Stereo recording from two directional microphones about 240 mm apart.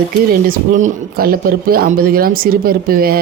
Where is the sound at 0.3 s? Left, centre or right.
Right.